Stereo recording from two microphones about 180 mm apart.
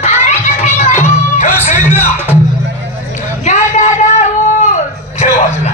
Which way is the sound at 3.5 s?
40° left (ahead or behind).